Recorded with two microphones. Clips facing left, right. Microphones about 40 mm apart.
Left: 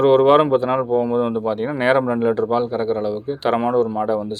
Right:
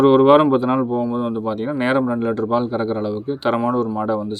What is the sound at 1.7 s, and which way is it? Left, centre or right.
Speech, centre.